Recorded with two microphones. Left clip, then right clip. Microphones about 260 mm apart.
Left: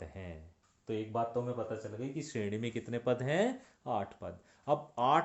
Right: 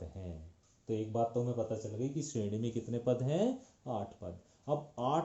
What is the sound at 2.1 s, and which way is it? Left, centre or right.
Speech, centre.